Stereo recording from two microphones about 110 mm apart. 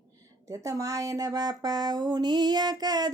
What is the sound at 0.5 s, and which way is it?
Speech, 30° right (ahead or behind).